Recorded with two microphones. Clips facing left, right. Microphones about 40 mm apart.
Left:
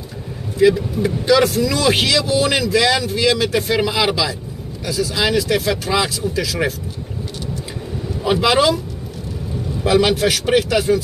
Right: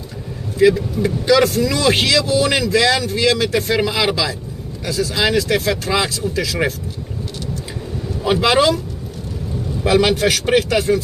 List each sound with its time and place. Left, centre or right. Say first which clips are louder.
0.6 s speech: even; centre
8.4 s speech: right 1 dB; centre
9.8 s speech: even; centre